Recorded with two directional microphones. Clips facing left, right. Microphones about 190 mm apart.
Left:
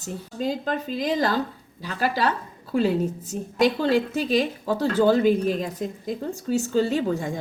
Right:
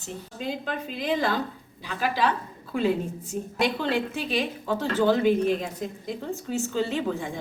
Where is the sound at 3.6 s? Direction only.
40° left (ahead or behind).